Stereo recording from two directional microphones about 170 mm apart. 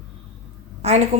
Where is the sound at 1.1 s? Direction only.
40° right (ahead or behind).